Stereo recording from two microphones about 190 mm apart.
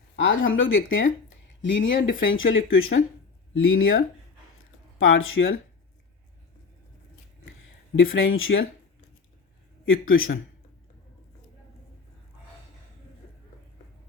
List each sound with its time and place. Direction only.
0.2 s speech: 90° left
1.6 s speech: 75° left (ahead or behind); by 5.5 s 90° left
7.9 s speech: 90° left
9.8 s speech: 90° left